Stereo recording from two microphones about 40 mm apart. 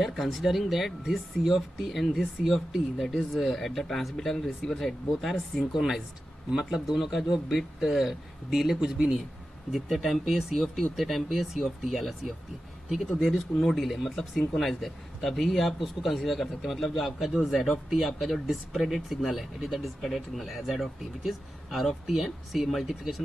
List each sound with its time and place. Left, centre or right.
0.0 s speech: centre
5.8 s speech: centre
8.8 s speech: centre
9.7 s speech: centre